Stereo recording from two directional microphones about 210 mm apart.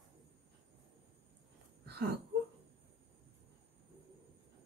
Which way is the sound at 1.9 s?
50° right (ahead or behind).